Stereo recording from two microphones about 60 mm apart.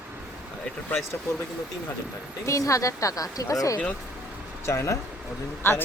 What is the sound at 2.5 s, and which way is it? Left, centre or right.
A woman's voice, left.